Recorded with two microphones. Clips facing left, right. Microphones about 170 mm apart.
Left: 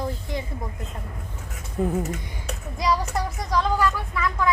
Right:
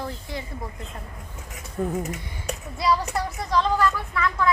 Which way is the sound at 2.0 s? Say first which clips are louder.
Left 2 dB; 10° right (ahead or behind).